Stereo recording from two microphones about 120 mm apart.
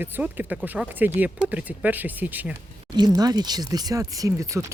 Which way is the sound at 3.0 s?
35° right (ahead or behind).